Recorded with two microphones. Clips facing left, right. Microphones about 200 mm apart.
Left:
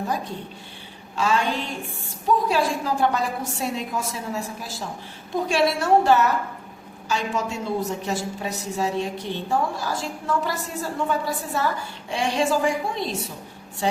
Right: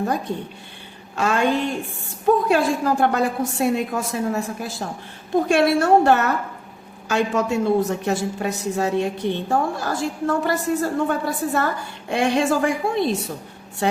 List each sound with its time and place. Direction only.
1.1 s a woman's voice: 55° right (ahead or behind)